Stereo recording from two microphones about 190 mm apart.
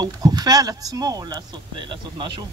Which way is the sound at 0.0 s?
20° right (ahead or behind).